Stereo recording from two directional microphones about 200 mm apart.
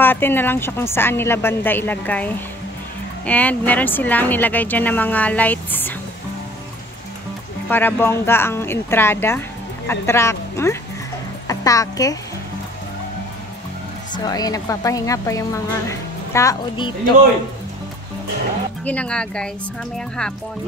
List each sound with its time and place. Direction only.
0.0 s a woman's voice: 10° left (ahead or behind)
7.7 s a woman's voice: 10° left (ahead or behind)
14.1 s a woman's voice: 20° left (ahead or behind)
18.9 s speech: 5° left (ahead or behind)